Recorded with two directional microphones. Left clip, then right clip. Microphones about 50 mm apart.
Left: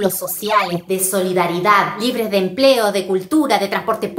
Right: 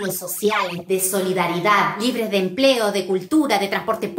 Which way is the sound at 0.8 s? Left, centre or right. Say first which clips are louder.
Left 2 dB; left.